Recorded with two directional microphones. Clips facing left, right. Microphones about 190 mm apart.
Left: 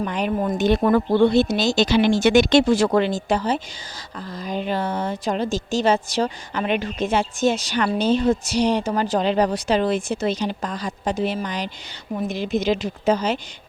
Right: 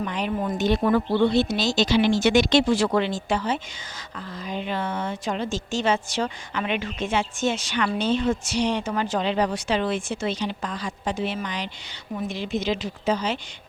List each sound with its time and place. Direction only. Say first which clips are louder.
0.0 s speech: left 4 dB; 45° left (ahead or behind)